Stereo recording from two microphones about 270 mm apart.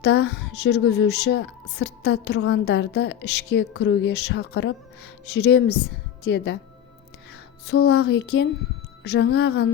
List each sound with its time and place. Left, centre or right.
0.0 s a woman's voice: left
7.7 s a woman's voice: left